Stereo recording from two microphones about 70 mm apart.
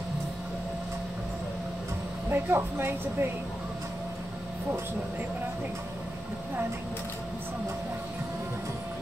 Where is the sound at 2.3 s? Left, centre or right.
Right.